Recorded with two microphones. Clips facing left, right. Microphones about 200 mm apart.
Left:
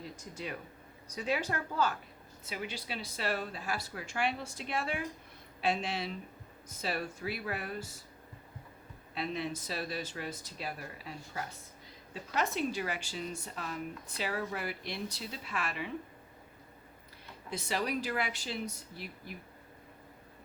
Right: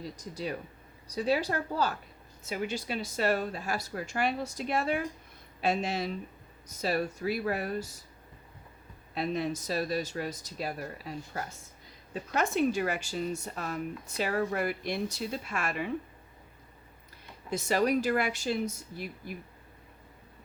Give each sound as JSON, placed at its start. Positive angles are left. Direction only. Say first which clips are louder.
{"t": 0.0, "sound": "speech", "louder": "right 5 dB", "side_deg": -35}
{"t": 9.1, "sound": "speech", "louder": "right 5 dB", "side_deg": -45}
{"t": 17.5, "sound": "speech", "louder": "right 7 dB", "side_deg": -45}